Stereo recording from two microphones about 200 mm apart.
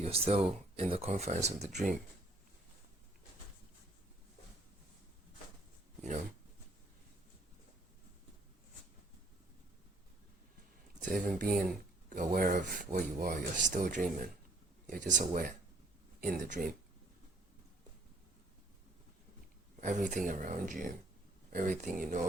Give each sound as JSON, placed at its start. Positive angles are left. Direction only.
{"t": 0.0, "sound": "speech", "side_deg": -30}
{"t": 11.0, "sound": "speech", "side_deg": -40}
{"t": 19.8, "sound": "speech", "side_deg": -40}